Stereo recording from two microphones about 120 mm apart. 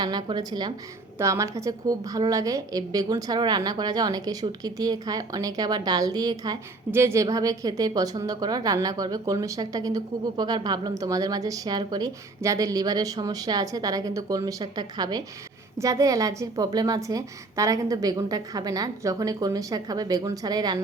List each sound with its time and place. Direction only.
0.0 s a woman's voice: 35° right (ahead or behind)
1.2 s a woman's voice: 25° right (ahead or behind)